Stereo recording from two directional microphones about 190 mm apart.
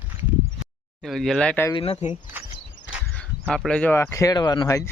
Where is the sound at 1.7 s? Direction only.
25° left (ahead or behind).